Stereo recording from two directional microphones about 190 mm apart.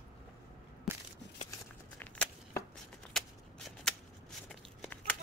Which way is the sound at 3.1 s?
Centre (ahead or behind).